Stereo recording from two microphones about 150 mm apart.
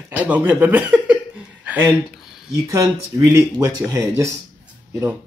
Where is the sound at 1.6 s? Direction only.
10° right (ahead or behind).